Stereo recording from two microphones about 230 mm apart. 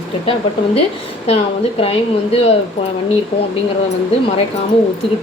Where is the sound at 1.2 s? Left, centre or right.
Left.